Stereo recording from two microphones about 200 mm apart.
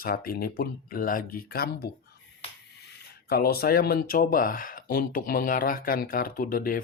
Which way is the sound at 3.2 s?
50° left (ahead or behind).